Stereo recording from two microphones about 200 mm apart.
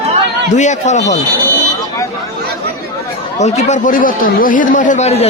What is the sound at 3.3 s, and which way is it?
Speech, 35° left (ahead or behind).